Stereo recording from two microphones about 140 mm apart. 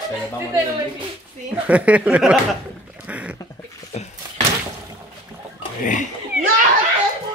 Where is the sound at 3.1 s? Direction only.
10° right (ahead or behind).